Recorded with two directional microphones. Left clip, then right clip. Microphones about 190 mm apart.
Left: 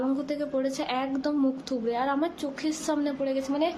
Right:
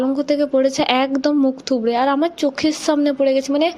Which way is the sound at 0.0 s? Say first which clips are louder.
Right 11 dB; 35° right (ahead or behind).